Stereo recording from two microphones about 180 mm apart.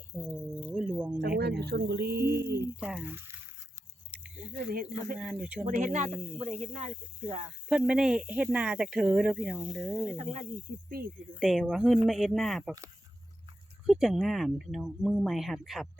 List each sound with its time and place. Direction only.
0.7 s music: centre (ahead or behind)
1.4 s speech: 65° right (ahead or behind)
2.8 s speech: 10° right (ahead or behind)
4.5 s speech: 55° right (ahead or behind)
5.1 s speech: 5° right (ahead or behind)
5.6 s speech: 45° right (ahead or behind)
7.7 s speech: 5° right (ahead or behind)
11.0 s speech: 55° right (ahead or behind)
11.3 s speech: centre (ahead or behind)
13.8 s speech: centre (ahead or behind)